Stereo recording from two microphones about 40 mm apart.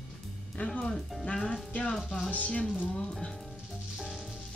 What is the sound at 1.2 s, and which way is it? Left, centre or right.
Speech, left.